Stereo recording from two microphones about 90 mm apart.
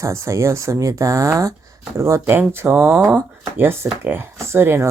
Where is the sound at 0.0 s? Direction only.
35° right (ahead or behind).